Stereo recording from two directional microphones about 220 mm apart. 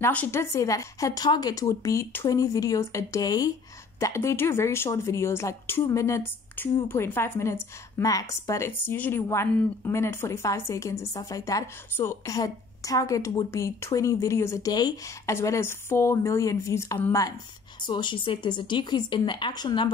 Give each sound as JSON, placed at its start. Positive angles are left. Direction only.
{"t": 0.0, "sound": "a woman's voice", "side_deg": 10}